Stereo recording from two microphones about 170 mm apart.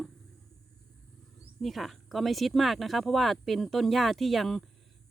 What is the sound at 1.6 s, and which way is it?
Speech, centre (ahead or behind).